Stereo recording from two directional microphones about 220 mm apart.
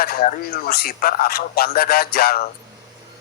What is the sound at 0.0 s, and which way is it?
Speech, 40° left (ahead or behind).